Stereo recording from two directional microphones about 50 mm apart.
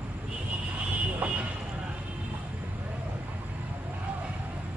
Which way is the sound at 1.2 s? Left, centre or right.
Right.